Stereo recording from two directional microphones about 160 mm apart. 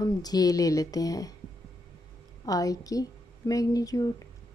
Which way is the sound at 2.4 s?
20° left (ahead or behind).